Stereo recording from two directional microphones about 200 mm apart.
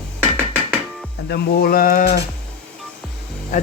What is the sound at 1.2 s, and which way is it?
Speech, 50° left (ahead or behind).